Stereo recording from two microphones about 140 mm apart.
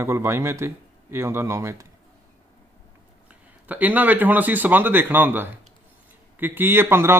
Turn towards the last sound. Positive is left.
turn(degrees=-15)  # may be behind; listen again after turning